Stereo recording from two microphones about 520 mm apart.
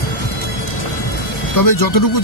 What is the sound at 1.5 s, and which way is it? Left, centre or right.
Speech, left.